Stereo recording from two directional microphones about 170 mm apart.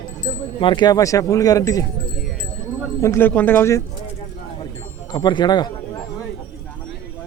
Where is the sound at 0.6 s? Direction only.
25° left (ahead or behind).